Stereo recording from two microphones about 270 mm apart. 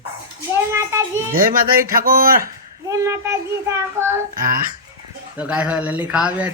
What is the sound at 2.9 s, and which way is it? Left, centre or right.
Speech, centre.